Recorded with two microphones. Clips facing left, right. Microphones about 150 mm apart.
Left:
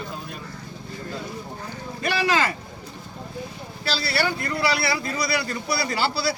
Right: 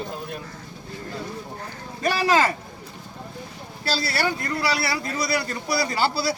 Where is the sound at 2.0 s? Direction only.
40° right (ahead or behind).